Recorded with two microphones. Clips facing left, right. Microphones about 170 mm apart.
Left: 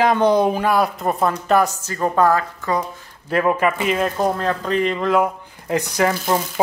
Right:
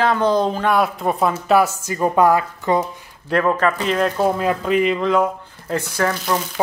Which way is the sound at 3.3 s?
10° left (ahead or behind).